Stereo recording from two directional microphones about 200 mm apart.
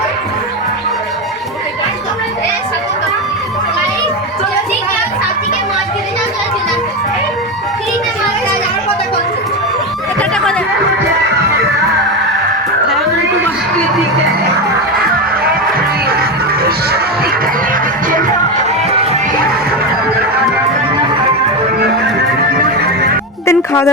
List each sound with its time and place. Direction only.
10.2 s chatter: 5° left (ahead or behind)
18.1 s music: 40° right (ahead or behind)
23.5 s music: 15° left (ahead or behind)